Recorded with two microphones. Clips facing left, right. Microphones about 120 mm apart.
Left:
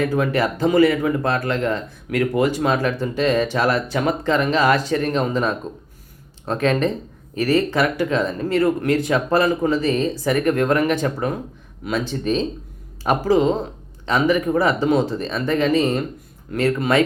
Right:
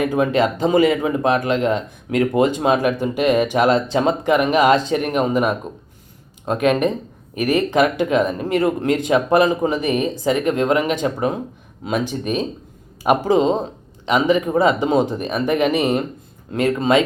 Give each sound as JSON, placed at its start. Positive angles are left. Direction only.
{"t": 0.0, "sound": "speech", "side_deg": -20}